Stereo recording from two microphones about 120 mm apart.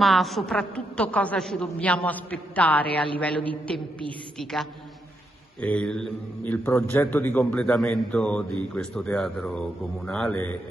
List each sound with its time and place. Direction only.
0.0 s a woman's voice: centre (ahead or behind); by 7.6 s 15° left (ahead or behind)
7.6 s a woman's voice: 5° left (ahead or behind)